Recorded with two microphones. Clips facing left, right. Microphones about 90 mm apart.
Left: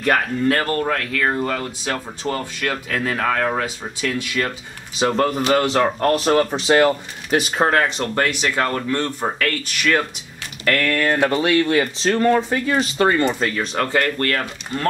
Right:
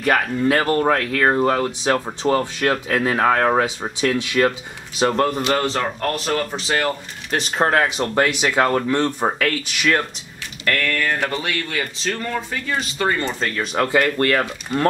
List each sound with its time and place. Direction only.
0.5 s speech: 15° right (ahead or behind)
0.8 s speech: 30° right (ahead or behind)
4.9 s speech: centre (ahead or behind); by 7.0 s 20° left (ahead or behind)
7.2 s speech: 5° left (ahead or behind); by 9.3 s 25° right (ahead or behind)
9.4 s speech: 10° right (ahead or behind)
10.7 s speech: 10° left (ahead or behind)
12.0 s speech: 35° left (ahead or behind)
12.6 s speech: 20° left (ahead or behind)
13.6 s speech: 5° right (ahead or behind)
14.1 s speech: 25° right (ahead or behind)